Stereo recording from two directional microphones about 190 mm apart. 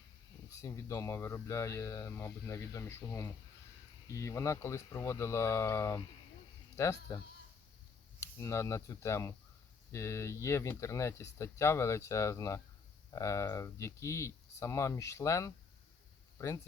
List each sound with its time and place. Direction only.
0.5 s speech: 15° left (ahead or behind)
8.2 s speech: 15° left (ahead or behind)